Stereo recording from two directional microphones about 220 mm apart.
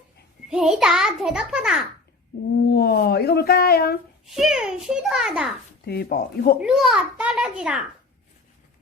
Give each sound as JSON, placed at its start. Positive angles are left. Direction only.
{"t": 0.5, "sound": "a child's voice", "side_deg": -5}
{"t": 2.6, "sound": "speech", "side_deg": 45}
{"t": 4.4, "sound": "a child's voice", "side_deg": -5}
{"t": 5.8, "sound": "speech", "side_deg": 45}
{"t": 6.6, "sound": "a child's voice", "side_deg": 0}